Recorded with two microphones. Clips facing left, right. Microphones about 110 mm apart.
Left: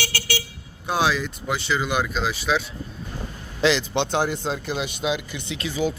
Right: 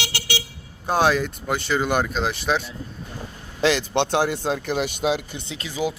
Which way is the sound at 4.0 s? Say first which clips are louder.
Right 2 dB; 65° right (ahead or behind).